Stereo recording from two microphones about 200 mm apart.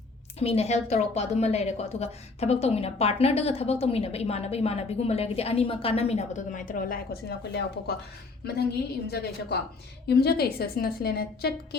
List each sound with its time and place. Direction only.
0.3 s a woman's voice: 30° left (ahead or behind); by 7.9 s 55° left (ahead or behind)
9.0 s a woman's voice: 55° left (ahead or behind)